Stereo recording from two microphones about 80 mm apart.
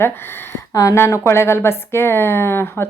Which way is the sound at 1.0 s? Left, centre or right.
Left.